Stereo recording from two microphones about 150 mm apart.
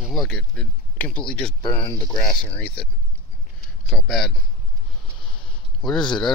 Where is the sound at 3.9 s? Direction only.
Centre (ahead or behind).